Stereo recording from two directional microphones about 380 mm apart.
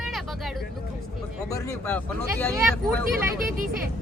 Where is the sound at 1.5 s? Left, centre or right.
Centre.